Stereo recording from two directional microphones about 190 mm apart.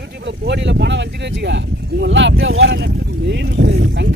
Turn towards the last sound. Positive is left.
turn(degrees=-60)  # may be behind; listen again after turning